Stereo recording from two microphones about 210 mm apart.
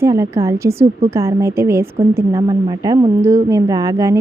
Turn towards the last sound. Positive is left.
turn(degrees=-15)  # may be behind; listen again after turning